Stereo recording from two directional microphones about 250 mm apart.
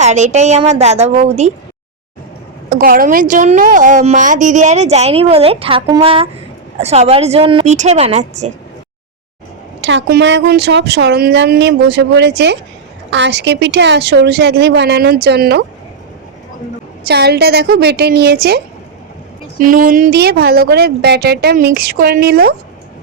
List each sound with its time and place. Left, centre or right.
0.0 s a woman's voice: right
2.6 s a woman's voice: right
9.8 s a woman's voice: right
17.1 s a woman's voice: right